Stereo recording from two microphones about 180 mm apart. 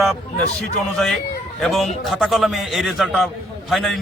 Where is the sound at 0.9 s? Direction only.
Centre (ahead or behind).